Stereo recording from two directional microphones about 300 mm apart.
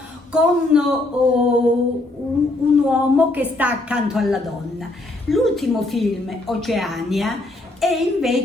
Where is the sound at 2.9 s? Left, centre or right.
Centre.